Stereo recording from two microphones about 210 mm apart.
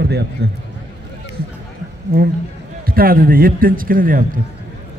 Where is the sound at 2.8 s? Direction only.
45° right (ahead or behind).